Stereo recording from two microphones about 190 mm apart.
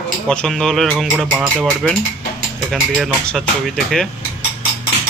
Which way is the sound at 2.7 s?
Centre (ahead or behind).